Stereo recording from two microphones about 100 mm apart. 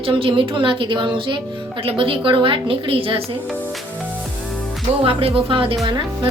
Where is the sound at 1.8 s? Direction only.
65° right (ahead or behind).